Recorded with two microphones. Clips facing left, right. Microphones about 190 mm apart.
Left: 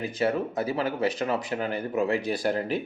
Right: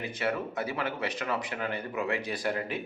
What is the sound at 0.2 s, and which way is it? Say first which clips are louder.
Speech: left 5 dB; 35° left (ahead or behind).